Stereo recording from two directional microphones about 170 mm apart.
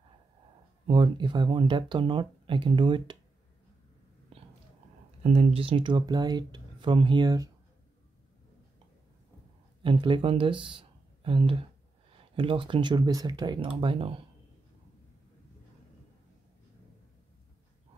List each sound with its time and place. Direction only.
0.8 s speech: 30° right (ahead or behind)
5.2 s speech: 35° right (ahead or behind); by 7.5 s 20° right (ahead or behind)
9.8 s speech: 30° right (ahead or behind)